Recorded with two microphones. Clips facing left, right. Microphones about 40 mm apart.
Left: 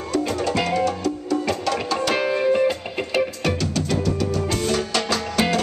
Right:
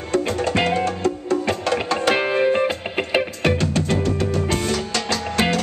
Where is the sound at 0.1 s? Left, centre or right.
Right.